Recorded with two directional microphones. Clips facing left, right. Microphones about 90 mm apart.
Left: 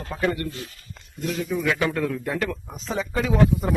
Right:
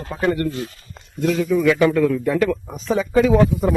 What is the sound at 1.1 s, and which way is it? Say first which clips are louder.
Speech: right 8 dB; 90° right.